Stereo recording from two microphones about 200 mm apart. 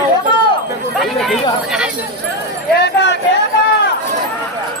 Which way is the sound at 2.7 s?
60° left (ahead or behind).